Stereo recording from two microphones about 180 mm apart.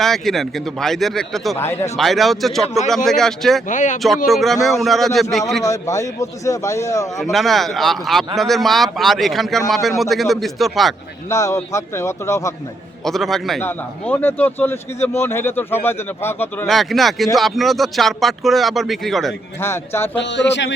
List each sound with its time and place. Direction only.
0.0 s speech: centre (ahead or behind)
1.5 s speech: 15° left (ahead or behind)
2.0 s speech: centre (ahead or behind)
3.7 s speech: 45° left (ahead or behind)
4.3 s speech: centre (ahead or behind)
5.6 s speech: 15° left (ahead or behind)
7.2 s speech: centre (ahead or behind)
11.3 s speech: 15° left (ahead or behind)
13.1 s speech: centre (ahead or behind)
16.6 s speech: centre (ahead or behind)
19.5 s speech: 15° left (ahead or behind)
20.1 s speech: 75° left (ahead or behind)